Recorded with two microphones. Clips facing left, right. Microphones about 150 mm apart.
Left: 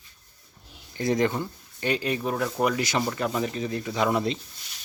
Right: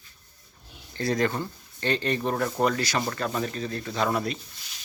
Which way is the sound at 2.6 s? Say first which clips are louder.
Left 1 dB; 15° left (ahead or behind).